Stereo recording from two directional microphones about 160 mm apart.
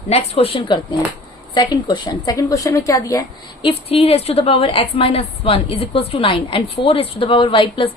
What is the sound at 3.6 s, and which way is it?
A woman's voice, 35° left (ahead or behind).